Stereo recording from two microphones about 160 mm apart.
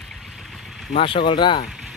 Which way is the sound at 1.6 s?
5° right (ahead or behind).